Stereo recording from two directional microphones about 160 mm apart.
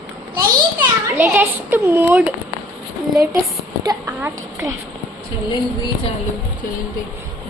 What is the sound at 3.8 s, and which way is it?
Speech, 15° right (ahead or behind).